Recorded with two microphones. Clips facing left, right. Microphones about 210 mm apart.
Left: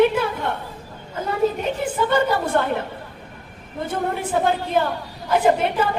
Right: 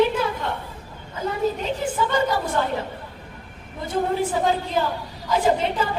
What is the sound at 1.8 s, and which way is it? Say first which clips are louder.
A woman's voice: left 3 dB; 60° left (ahead or behind).